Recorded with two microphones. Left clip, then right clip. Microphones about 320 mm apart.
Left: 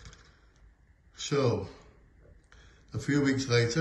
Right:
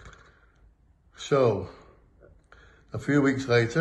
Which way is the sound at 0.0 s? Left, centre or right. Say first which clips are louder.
Right 4 dB; centre.